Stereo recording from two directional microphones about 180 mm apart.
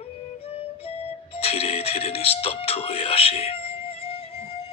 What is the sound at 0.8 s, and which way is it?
Music, 35° left (ahead or behind).